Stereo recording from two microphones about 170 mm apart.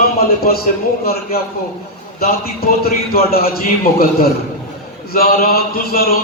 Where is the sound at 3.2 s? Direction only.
60° left (ahead or behind).